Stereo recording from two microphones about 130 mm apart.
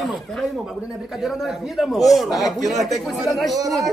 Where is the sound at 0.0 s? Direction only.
Centre (ahead or behind).